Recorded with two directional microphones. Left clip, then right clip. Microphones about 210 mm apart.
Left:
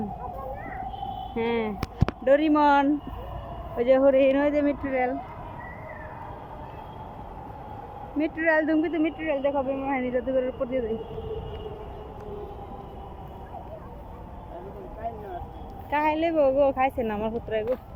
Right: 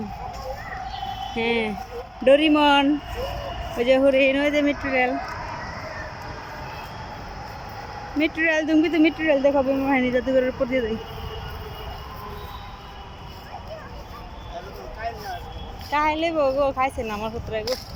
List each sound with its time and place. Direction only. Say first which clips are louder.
1.4 s speech: right 3 dB; 5° right (ahead or behind)
8.2 s speech: right 2 dB; 10° right (ahead or behind)
15.9 s speech: right 2 dB; 5° left (ahead or behind)